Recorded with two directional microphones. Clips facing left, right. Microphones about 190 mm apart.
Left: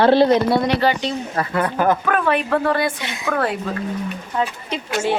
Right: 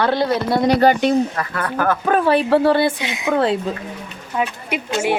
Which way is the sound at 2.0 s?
30° right (ahead or behind).